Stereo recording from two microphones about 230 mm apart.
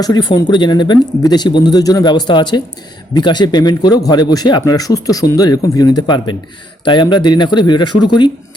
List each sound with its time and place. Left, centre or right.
0.0 s speech: centre